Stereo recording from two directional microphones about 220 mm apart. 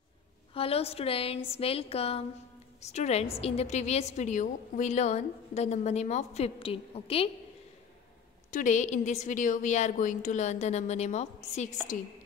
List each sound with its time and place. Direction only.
0.6 s a woman's voice: 25° left (ahead or behind)
8.5 s a woman's voice: 35° left (ahead or behind)